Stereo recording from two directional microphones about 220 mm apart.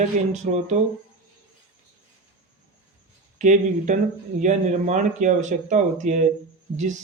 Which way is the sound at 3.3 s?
35° right (ahead or behind).